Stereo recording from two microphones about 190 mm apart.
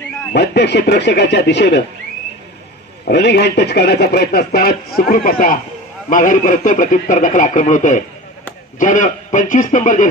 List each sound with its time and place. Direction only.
0.3 s speech: 65° left (ahead or behind)
3.1 s a man's voice: 60° left (ahead or behind); by 10.0 s 40° left (ahead or behind)